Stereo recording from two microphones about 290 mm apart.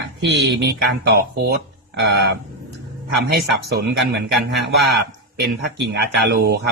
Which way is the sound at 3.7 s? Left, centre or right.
Right.